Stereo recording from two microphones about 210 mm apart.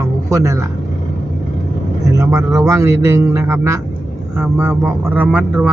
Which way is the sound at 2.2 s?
15° right (ahead or behind).